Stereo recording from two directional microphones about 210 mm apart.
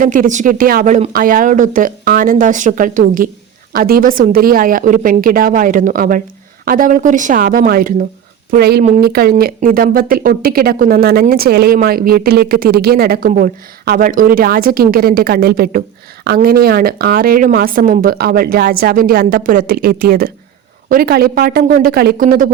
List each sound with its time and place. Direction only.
0.0 s speech: 40° right (ahead or behind)